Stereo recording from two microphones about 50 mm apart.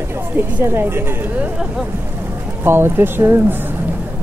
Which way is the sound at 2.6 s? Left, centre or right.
Right.